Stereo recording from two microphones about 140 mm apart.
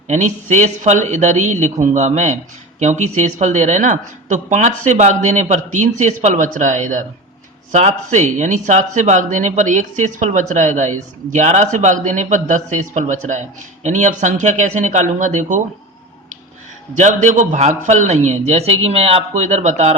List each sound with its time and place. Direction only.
0.1 s a man's voice: 60° right (ahead or behind)
16.9 s a man's voice: 60° right (ahead or behind)